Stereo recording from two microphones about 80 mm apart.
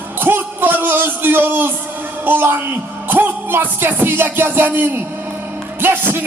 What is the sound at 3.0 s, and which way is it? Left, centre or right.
Music, right.